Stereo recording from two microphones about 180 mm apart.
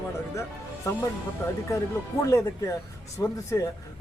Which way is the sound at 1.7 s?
15° left (ahead or behind).